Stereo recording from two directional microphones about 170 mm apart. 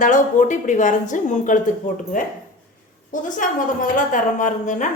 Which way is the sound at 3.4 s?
50° left (ahead or behind).